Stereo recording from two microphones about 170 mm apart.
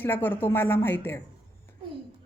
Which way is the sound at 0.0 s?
10° left (ahead or behind).